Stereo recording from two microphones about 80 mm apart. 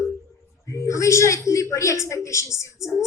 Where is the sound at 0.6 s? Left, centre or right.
Left.